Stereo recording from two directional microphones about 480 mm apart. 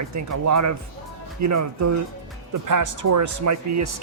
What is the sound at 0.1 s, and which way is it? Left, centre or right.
Speech, right.